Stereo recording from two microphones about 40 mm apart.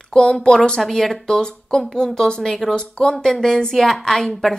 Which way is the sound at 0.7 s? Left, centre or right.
Centre.